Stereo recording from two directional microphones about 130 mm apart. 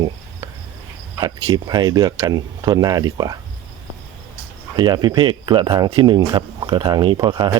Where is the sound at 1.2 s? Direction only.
35° right (ahead or behind).